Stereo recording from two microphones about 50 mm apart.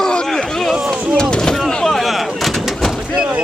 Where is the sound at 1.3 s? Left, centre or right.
Centre.